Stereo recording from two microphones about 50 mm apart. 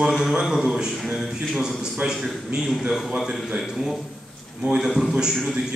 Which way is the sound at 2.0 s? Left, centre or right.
Right.